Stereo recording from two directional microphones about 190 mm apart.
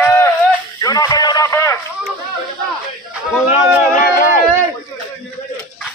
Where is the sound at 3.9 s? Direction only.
50° left (ahead or behind).